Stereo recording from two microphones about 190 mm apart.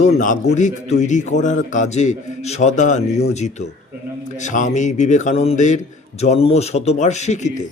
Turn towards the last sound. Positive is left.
turn(degrees=40)  # may be behind; listen again after turning